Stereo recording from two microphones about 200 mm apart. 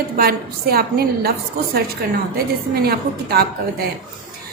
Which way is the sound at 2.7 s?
50° right (ahead or behind).